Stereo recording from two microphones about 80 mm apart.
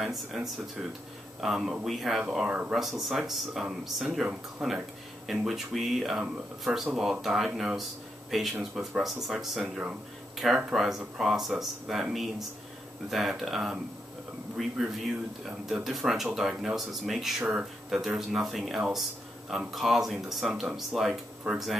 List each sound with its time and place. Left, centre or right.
0.0 s speech: centre
2.3 s speech: centre
2.7 s speech: centre
8.5 s speech: centre
9.0 s speech: centre
17.4 s speech: centre
17.8 s speech: centre